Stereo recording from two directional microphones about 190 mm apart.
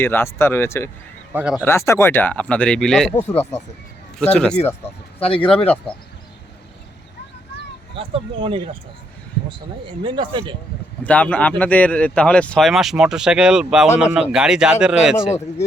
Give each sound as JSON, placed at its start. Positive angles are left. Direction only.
{"t": 0.0, "sound": "speech", "side_deg": 10}
{"t": 1.3, "sound": "speech", "side_deg": -10}
{"t": 1.5, "sound": "speech", "side_deg": 15}
{"t": 5.2, "sound": "speech", "side_deg": 30}
{"t": 7.9, "sound": "speech", "side_deg": -25}
{"t": 10.0, "sound": "speech", "side_deg": -25}
{"t": 11.0, "sound": "speech", "side_deg": 5}